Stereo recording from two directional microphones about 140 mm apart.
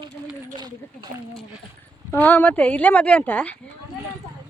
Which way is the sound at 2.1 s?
10° left (ahead or behind).